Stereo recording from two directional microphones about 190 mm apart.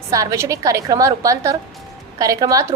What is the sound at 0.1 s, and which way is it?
A woman's voice, 15° right (ahead or behind).